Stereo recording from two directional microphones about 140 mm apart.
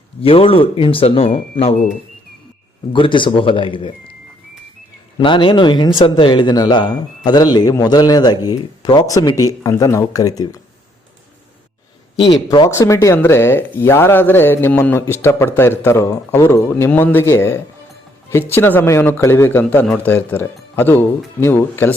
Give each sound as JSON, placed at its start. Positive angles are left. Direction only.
{"t": 0.2, "sound": "speech", "side_deg": 40}
{"t": 2.9, "sound": "speech", "side_deg": 35}
{"t": 5.2, "sound": "a man's voice", "side_deg": 35}
{"t": 12.5, "sound": "speech", "side_deg": 25}